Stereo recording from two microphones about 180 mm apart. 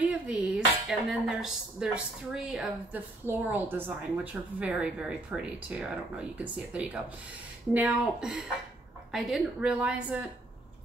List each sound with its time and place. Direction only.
0.0 s a woman's voice: 5° right (ahead or behind)